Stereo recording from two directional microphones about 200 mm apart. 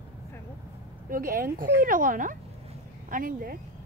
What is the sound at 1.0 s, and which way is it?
Speech, 45° right (ahead or behind).